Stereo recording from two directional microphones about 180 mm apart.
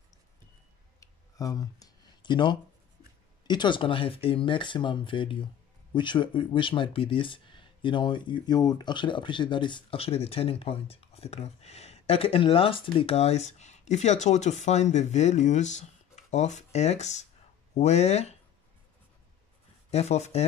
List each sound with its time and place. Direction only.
1.0 s a sound: 20° left (ahead or behind)
3.4 s speech: 25° left (ahead or behind)
19.9 s speech: 35° left (ahead or behind)